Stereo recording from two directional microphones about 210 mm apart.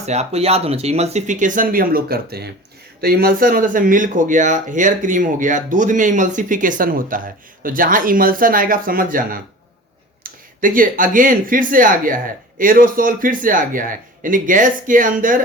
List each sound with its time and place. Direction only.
0.0 s speech: 30° right (ahead or behind)